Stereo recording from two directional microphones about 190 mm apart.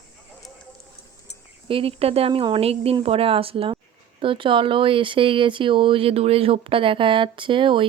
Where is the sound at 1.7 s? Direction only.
30° right (ahead or behind).